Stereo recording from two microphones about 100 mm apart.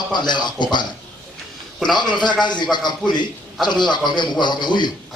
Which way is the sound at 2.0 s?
50° left (ahead or behind).